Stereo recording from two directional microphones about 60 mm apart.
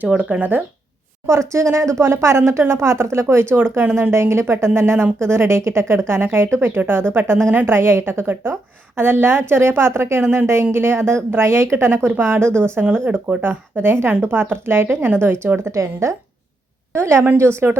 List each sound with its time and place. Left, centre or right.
0.0 s speech: right
1.3 s a woman's voice: right
3.5 s a woman's voice: right
7.6 s a woman's voice: right
12.0 s speech: right
13.1 s speech: right
15.7 s a woman's voice: right